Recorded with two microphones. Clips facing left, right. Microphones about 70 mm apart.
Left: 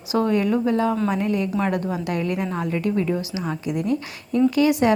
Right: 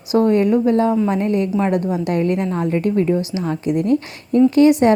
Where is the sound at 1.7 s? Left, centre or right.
Left.